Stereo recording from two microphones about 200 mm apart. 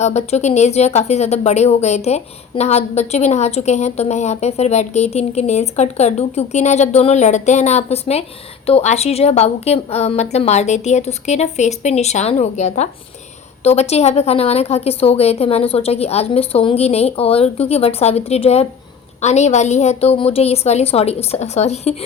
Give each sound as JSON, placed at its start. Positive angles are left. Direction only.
{"t": 0.0, "sound": "speech", "side_deg": 35}